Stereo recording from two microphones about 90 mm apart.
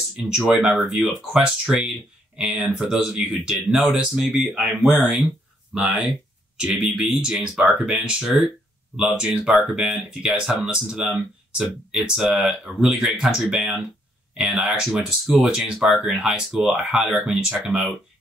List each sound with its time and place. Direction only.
0.3 s speech: 5° right (ahead or behind)